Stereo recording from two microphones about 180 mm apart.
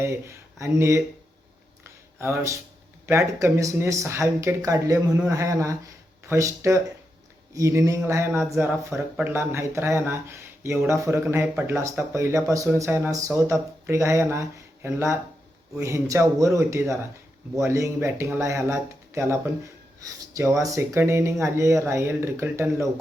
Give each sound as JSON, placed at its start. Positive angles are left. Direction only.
{"t": 0.0, "sound": "speech", "side_deg": -15}
{"t": 2.2, "sound": "speech", "side_deg": -15}
{"t": 5.0, "sound": "speech", "side_deg": -5}
{"t": 5.3, "sound": "speech", "side_deg": -15}